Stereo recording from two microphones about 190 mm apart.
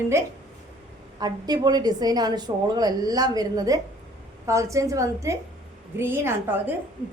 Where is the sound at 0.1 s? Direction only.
15° right (ahead or behind).